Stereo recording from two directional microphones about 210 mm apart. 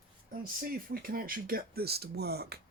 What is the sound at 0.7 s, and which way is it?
Speech, 45° right (ahead or behind).